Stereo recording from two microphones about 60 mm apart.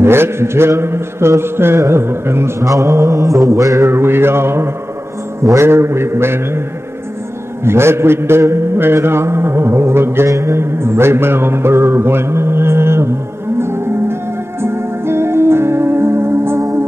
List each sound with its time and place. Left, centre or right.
0.0 s a man's voice: right
2.6 s mantra: right
3.8 s a man's voice: right
7.6 s a man's voice: right
10.4 s mantra: right
14.6 s music: right